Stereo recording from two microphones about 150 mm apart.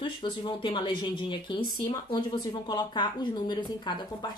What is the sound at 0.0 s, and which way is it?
A woman's voice, 30° left (ahead or behind).